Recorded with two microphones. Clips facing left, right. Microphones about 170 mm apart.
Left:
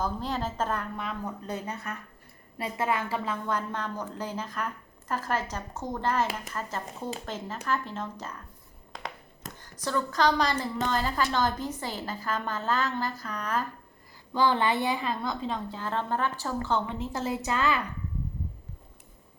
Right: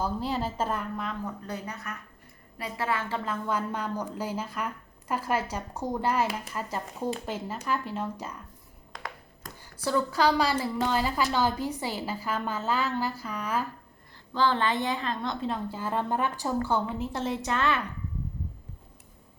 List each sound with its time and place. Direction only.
0.0 s a woman's voice: 10° right (ahead or behind)
1.2 s speech: 25° left (ahead or behind)
3.2 s a woman's voice: 10° right (ahead or behind)
9.6 s a woman's voice: 10° right (ahead or behind)
14.3 s a woman's voice: 15° left (ahead or behind)